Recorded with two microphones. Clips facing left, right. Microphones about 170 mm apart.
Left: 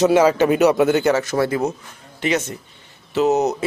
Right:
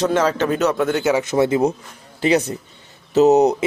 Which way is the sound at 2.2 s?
35° right (ahead or behind).